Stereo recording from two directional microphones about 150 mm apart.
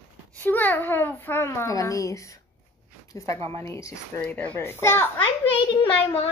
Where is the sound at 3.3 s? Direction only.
40° right (ahead or behind).